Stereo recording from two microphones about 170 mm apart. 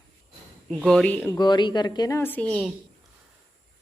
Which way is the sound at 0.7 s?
Centre (ahead or behind).